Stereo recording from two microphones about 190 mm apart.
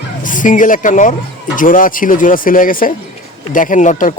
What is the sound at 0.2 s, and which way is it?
Speech, 45° left (ahead or behind).